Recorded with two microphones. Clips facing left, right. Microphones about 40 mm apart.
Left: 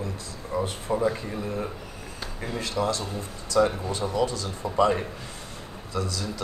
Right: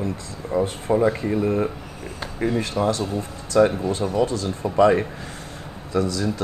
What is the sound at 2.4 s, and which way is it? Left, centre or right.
Speech, right.